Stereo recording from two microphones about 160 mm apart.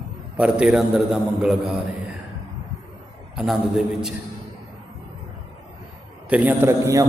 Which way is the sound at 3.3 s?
5° right (ahead or behind).